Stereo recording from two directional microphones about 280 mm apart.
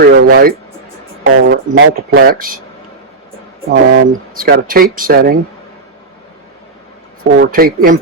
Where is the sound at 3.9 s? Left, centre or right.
Right.